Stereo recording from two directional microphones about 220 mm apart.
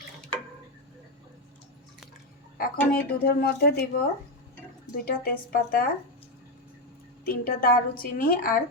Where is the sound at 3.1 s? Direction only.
45° left (ahead or behind).